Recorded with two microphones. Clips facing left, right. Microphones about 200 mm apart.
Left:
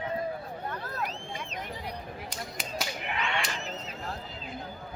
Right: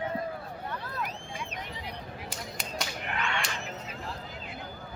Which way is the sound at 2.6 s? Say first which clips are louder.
Left 1 dB; centre (ahead or behind).